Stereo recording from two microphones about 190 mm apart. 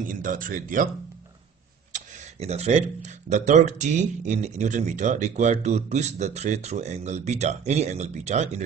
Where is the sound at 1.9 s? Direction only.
40° right (ahead or behind).